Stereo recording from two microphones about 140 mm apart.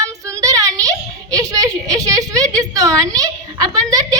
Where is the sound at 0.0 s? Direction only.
25° right (ahead or behind).